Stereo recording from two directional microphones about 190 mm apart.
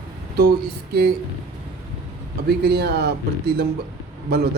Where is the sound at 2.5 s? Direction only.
60° right (ahead or behind).